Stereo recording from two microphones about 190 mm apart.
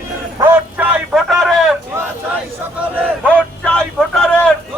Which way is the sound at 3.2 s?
5° left (ahead or behind).